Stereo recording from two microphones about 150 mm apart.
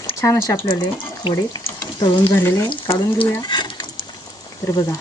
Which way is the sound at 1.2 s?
35° left (ahead or behind).